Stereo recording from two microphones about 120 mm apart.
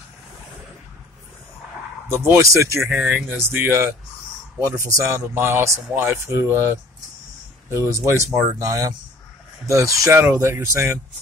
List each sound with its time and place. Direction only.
2.0 s a man's voice: 20° right (ahead or behind)
2.8 s speech: 5° right (ahead or behind)
3.3 s a man's voice: 15° right (ahead or behind)